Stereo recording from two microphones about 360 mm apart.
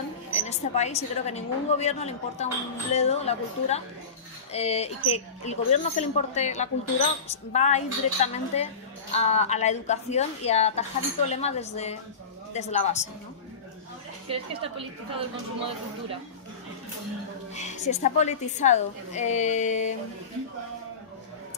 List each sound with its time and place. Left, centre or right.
0.3 s a woman's voice: centre
17.6 s speech: centre